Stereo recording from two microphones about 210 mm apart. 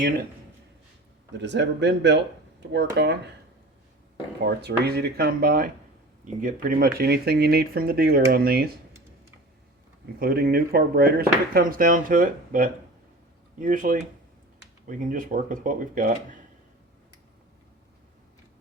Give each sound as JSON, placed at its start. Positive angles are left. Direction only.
{"t": 1.3, "sound": "speech", "side_deg": -55}
{"t": 4.4, "sound": "speech", "side_deg": -50}
{"t": 10.2, "sound": "speech", "side_deg": -45}